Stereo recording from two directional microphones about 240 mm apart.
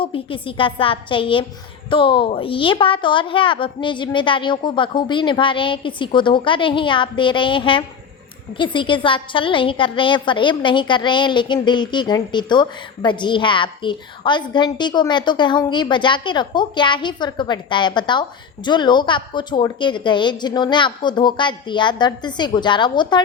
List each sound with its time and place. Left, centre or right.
0.0 s a woman's voice: left